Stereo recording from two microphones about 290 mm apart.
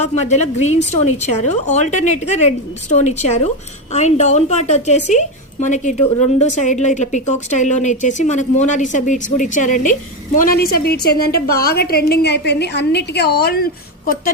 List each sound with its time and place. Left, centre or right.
0.0 s a woman's voice: left